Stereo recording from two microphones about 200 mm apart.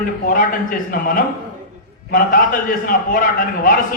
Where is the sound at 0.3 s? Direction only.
45° left (ahead or behind).